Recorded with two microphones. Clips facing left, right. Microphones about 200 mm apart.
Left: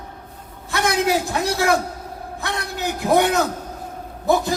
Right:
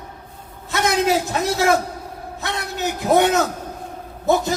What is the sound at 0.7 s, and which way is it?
A man's voice, 20° right (ahead or behind).